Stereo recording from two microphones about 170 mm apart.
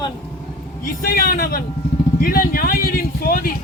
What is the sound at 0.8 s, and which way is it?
A man's voice, 55° left (ahead or behind).